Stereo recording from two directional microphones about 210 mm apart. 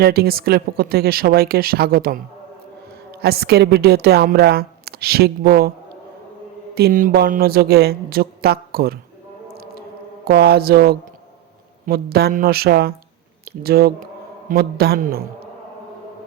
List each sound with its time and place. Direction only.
0.0 s a woman's voice: 45° right (ahead or behind)
6.7 s a woman's voice: 45° right (ahead or behind)
10.2 s a woman's voice: 50° right (ahead or behind)